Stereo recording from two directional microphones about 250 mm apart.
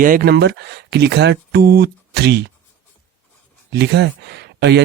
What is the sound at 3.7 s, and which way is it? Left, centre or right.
Speech, right.